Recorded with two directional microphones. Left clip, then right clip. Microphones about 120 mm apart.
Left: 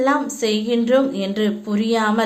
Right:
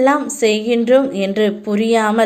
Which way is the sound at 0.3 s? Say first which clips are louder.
Right 5 dB; 35° right (ahead or behind).